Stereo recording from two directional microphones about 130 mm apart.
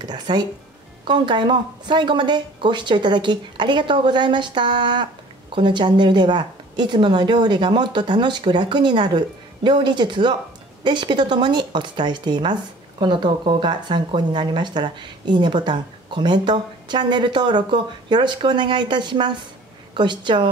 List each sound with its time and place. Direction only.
0.0 s a woman's voice: 35° right (ahead or behind)